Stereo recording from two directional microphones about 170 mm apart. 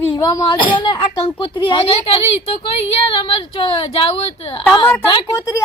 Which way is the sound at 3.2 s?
30° left (ahead or behind).